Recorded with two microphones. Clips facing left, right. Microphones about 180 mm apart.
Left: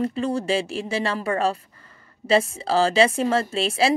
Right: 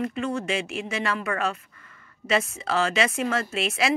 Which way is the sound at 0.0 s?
35° left (ahead or behind).